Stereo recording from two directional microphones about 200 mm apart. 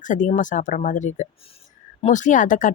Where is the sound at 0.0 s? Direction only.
40° left (ahead or behind).